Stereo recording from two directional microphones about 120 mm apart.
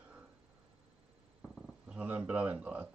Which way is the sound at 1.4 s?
Centre (ahead or behind).